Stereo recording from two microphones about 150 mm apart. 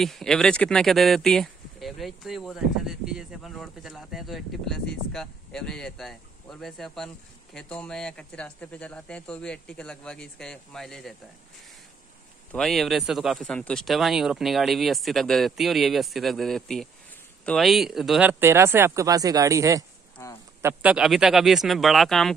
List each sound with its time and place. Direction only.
0.0 s speech: centre (ahead or behind)
12.5 s speech: centre (ahead or behind)
18.4 s speech: 15° right (ahead or behind)
20.2 s a sound: 20° left (ahead or behind)
20.6 s speech: 10° right (ahead or behind)